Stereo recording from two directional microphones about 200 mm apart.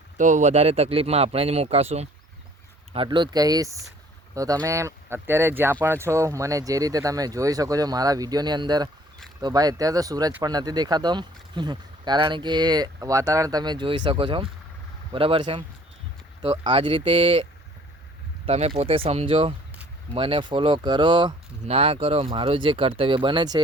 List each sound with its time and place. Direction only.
0.2 s speech: 40° right (ahead or behind)